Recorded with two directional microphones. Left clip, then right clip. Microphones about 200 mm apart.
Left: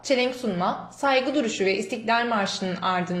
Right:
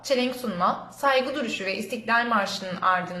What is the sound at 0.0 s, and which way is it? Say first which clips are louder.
A woman's voice: left 2 dB; 15° left (ahead or behind).